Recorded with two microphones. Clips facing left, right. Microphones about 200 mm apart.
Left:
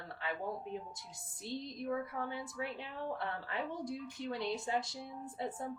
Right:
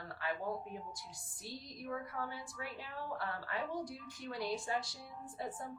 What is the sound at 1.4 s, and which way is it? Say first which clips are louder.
A woman's voice: left 6 dB; 25° left (ahead or behind).